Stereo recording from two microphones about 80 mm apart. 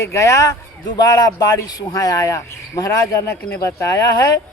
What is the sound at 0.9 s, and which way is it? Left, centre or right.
Speech, left.